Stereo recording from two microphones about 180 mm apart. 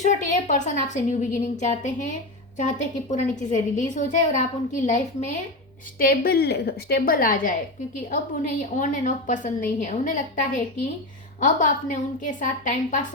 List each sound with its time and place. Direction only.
0.0 s a woman's voice: 40° left (ahead or behind)
6.0 s a woman's voice: 55° left (ahead or behind)
8.8 s a woman's voice: 45° left (ahead or behind)